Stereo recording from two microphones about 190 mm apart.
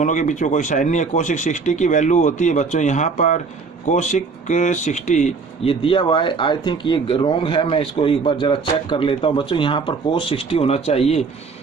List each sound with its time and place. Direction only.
0.0 s speech: 40° left (ahead or behind)